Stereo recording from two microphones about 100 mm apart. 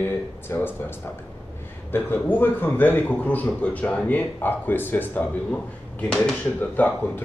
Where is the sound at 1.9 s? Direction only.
20° left (ahead or behind).